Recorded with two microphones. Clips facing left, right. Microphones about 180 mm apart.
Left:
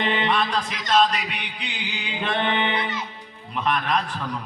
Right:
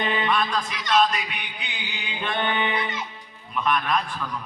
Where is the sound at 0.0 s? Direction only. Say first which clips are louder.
Left 1 dB; 30° left (ahead or behind).